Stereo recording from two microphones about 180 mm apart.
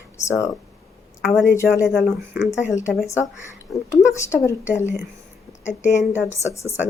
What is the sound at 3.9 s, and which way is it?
Speech, 15° left (ahead or behind).